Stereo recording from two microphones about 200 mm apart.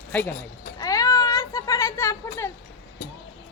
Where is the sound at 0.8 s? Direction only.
20° left (ahead or behind).